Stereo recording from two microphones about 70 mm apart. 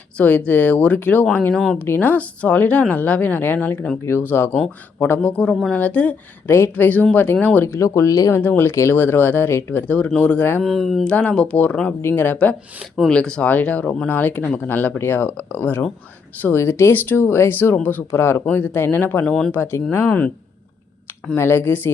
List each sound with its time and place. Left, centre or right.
0.2 s speech: left
5.2 s speech: centre
7.7 s speech: left
8.3 s speech: left
10.6 s speech: centre
11.0 s speech: centre
13.1 s speech: centre
19.2 s speech: centre
19.5 s speech: left
21.3 s speech: left